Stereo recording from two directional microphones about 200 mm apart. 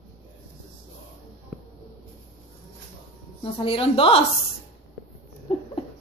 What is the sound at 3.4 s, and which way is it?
Speech, 25° left (ahead or behind).